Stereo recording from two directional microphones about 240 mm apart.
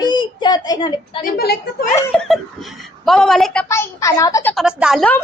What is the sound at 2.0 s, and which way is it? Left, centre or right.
A woman's voice, centre.